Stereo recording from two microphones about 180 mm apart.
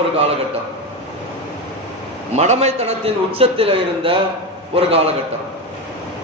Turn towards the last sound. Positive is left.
turn(degrees=-35)  # may be behind; listen again after turning